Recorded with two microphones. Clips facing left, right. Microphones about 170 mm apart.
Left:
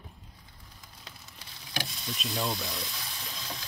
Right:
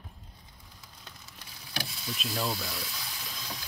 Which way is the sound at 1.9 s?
5° right (ahead or behind).